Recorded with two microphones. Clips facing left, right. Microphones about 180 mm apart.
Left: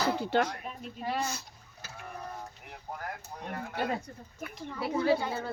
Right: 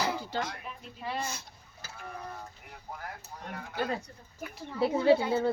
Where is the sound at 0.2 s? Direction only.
65° left (ahead or behind).